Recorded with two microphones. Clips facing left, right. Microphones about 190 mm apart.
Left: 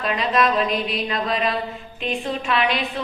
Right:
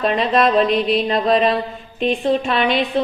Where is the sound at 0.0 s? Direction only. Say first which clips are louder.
Right 5 dB; 35° right (ahead or behind).